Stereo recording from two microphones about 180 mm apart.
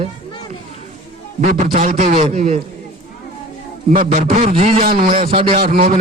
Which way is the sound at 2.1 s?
30° right (ahead or behind).